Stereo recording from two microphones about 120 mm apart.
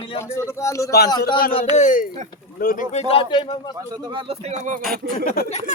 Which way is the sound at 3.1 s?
45° left (ahead or behind).